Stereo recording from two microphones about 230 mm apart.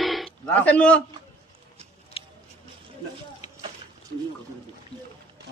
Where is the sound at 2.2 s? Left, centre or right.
Left.